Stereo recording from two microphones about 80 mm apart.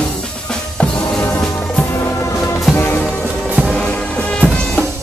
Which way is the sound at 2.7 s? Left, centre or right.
Centre.